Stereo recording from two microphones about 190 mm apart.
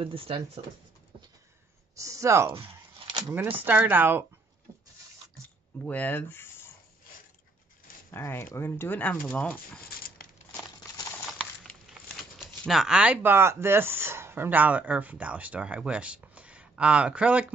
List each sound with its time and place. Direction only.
0.0 s speech: 30° right (ahead or behind)
2.0 s speech: 15° right (ahead or behind)
5.9 s speech: 10° left (ahead or behind)
8.1 s speech: 15° left (ahead or behind)
11.2 s speech: centre (ahead or behind)